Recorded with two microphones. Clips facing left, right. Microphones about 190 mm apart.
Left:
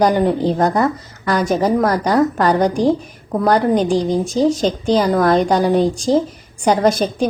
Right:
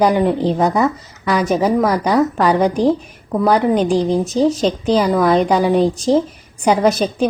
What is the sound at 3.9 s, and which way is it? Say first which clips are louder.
Speech: right 1 dB; 30° right (ahead or behind).